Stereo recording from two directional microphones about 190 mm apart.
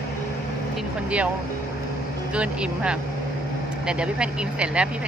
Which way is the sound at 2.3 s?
5° right (ahead or behind).